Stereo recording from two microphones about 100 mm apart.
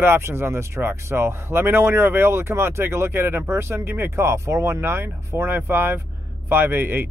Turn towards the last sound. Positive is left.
turn(degrees=-20)  # may be behind; listen again after turning